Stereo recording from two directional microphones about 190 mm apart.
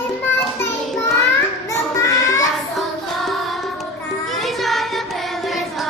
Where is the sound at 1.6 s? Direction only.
15° left (ahead or behind).